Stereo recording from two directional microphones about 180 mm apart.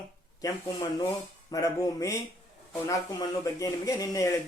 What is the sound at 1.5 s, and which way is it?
Speech, 20° left (ahead or behind).